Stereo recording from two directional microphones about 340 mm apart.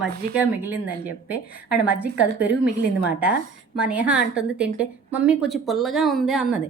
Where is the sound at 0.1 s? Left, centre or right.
Right.